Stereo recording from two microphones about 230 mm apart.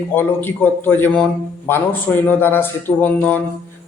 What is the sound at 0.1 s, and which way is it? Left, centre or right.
A man's voice, centre.